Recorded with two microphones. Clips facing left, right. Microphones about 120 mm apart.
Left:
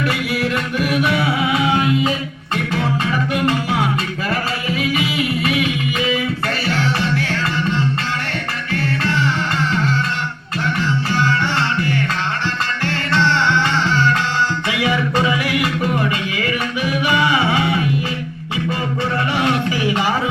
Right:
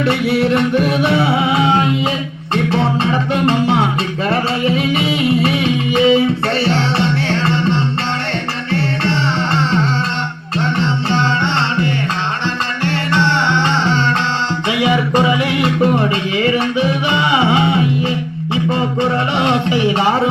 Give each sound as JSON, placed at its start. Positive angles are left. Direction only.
{"t": 0.0, "sound": "music", "side_deg": -25}
{"t": 12.8, "sound": "music", "side_deg": -20}